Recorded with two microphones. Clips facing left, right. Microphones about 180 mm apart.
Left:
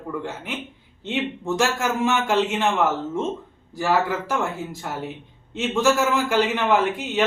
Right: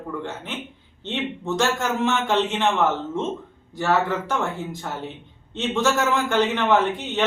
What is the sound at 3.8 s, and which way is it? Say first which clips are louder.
Speech: even; 5° left (ahead or behind).